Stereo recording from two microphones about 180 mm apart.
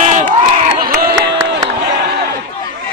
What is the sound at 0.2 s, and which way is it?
Crowd, 40° right (ahead or behind).